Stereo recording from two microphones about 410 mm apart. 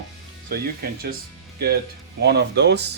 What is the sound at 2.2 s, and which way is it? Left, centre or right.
Speech, right.